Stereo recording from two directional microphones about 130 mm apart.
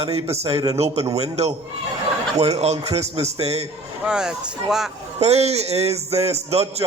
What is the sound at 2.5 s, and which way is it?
A man's voice, 55° right (ahead or behind).